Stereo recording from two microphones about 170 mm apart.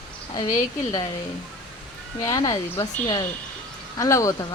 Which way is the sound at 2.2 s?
25° left (ahead or behind).